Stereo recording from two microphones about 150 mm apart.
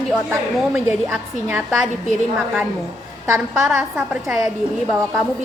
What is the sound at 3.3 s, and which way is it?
Speech, 15° right (ahead or behind).